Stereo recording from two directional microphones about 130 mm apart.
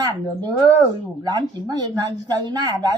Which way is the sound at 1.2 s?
30° right (ahead or behind).